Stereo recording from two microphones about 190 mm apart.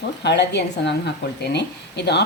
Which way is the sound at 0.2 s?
65° left (ahead or behind).